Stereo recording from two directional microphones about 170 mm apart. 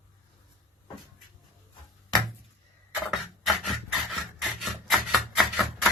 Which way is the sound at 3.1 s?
Centre (ahead or behind).